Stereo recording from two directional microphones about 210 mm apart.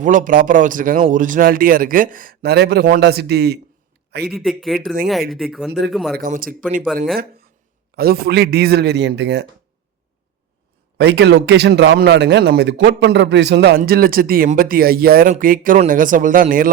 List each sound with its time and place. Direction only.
0.0 s a man's voice: 35° right (ahead or behind)
4.3 s speech: centre (ahead or behind)
6.1 s speech: 40° right (ahead or behind)
6.7 s speech: 5° right (ahead or behind)
7.9 s a man's voice: 45° right (ahead or behind)
10.9 s a man's voice: 55° right (ahead or behind)